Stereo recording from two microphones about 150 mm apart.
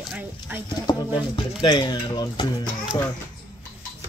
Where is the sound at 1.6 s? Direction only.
30° left (ahead or behind).